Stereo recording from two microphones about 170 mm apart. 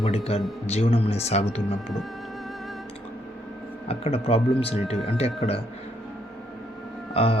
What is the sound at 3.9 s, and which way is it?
Speech, 35° left (ahead or behind).